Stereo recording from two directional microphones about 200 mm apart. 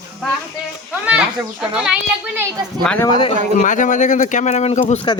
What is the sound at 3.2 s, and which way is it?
Speech, 30° left (ahead or behind).